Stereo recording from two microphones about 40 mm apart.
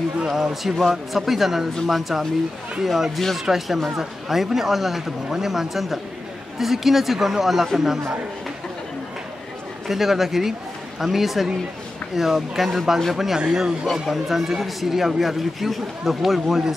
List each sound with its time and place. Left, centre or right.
0.3 s a man's voice: centre
9.8 s a man's voice: centre
13.4 s speech: centre
14.0 s a man's voice: centre